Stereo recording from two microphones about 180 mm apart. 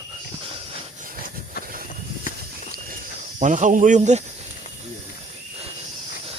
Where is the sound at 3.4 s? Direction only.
45° right (ahead or behind).